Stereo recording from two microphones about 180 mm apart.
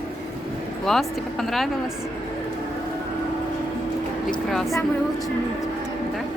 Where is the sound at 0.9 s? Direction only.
Centre (ahead or behind).